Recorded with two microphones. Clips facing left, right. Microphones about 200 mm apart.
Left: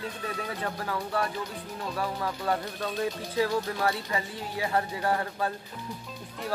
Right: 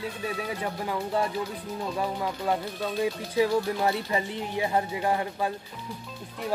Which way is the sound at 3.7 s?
20° right (ahead or behind).